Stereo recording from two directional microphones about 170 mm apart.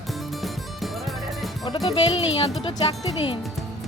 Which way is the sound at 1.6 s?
25° left (ahead or behind).